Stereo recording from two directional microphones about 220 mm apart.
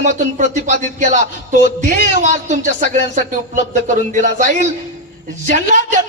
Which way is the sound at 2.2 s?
35° right (ahead or behind).